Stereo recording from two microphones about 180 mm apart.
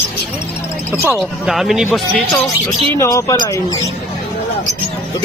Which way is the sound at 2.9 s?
20° left (ahead or behind).